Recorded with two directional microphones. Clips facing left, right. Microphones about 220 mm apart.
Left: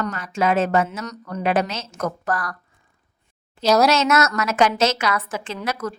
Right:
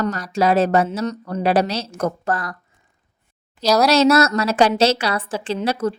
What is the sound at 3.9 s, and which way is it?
A woman's voice, 35° right (ahead or behind).